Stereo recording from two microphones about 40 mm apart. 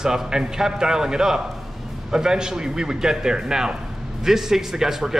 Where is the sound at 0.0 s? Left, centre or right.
Centre.